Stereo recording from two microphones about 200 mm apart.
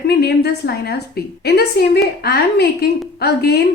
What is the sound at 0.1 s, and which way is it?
A woman's voice, 55° left (ahead or behind).